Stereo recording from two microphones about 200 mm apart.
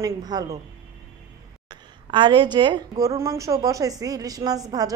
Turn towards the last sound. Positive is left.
turn(degrees=-20)  # may be behind; listen again after turning